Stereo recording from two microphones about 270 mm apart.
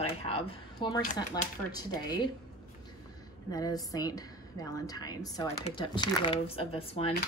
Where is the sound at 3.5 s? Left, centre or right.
Centre.